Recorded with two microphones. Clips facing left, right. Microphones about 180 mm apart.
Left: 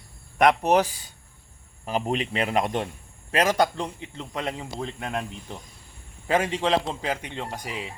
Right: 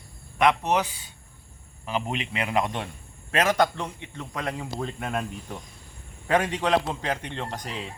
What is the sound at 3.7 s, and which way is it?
Speech, 30° left (ahead or behind).